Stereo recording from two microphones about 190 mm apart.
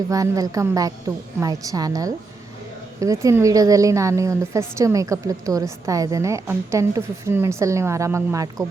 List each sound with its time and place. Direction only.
0.1 s a woman's voice: 20° right (ahead or behind)